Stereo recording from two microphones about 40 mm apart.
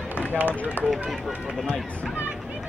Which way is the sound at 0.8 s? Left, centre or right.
Left.